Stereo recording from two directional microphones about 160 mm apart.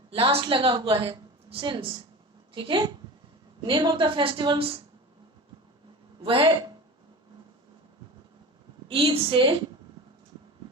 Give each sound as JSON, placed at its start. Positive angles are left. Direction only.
{"t": 0.1, "sound": "a woman's voice", "side_deg": -35}
{"t": 6.2, "sound": "a woman's voice", "side_deg": -35}
{"t": 8.9, "sound": "a woman's voice", "side_deg": -35}